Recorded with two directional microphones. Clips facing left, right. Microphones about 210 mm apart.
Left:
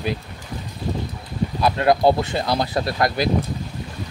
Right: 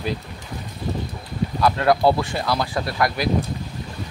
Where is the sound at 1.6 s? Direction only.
20° left (ahead or behind).